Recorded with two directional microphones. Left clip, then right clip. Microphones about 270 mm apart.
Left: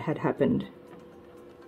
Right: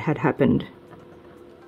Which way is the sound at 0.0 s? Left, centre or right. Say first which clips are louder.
Right 5 dB; right.